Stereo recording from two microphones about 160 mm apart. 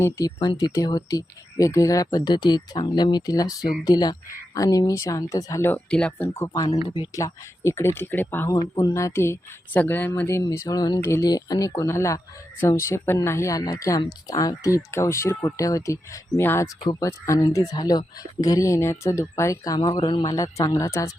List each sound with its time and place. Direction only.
0.3 s speech: 25° left (ahead or behind)
6.4 s speech: 20° left (ahead or behind)
8.5 s speech: 20° left (ahead or behind)